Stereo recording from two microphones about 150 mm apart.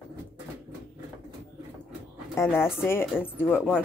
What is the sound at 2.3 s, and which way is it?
A woman's voice, 15° left (ahead or behind).